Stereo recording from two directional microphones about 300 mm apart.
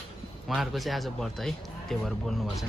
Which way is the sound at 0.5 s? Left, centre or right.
Centre.